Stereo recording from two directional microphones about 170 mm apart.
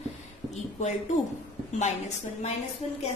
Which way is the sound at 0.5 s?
45° left (ahead or behind).